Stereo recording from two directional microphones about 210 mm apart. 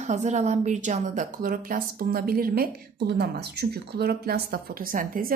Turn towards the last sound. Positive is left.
turn(degrees=-40)  # may be behind; listen again after turning